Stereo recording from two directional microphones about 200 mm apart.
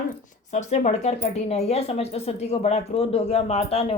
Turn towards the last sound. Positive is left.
turn(degrees=30)  # may be behind; listen again after turning